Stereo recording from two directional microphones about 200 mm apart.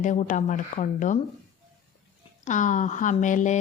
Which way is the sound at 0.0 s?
40° left (ahead or behind).